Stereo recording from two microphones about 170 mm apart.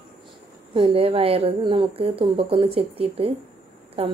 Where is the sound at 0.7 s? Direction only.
30° right (ahead or behind).